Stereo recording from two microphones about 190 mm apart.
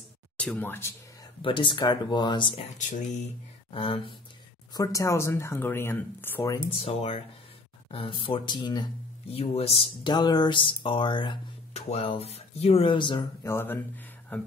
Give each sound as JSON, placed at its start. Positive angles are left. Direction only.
{"t": 0.4, "sound": "speech", "side_deg": 10}
{"t": 1.4, "sound": "speech", "side_deg": 25}
{"t": 3.7, "sound": "speech", "side_deg": 30}
{"t": 4.7, "sound": "speech", "side_deg": 15}
{"t": 6.7, "sound": "speech", "side_deg": 30}